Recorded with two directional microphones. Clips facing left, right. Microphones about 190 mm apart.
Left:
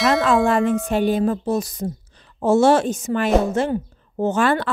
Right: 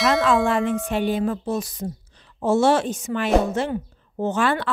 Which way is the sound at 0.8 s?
40° left (ahead or behind).